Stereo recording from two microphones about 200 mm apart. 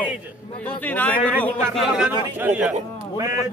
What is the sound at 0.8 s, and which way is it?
Speech, 10° left (ahead or behind).